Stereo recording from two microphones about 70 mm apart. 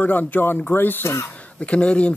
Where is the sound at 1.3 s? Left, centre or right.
Centre.